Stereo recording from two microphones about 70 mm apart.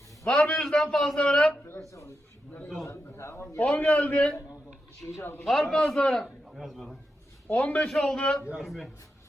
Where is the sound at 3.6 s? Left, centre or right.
Centre.